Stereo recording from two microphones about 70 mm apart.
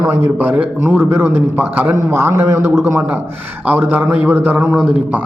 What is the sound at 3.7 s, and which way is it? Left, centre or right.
A man's voice, right.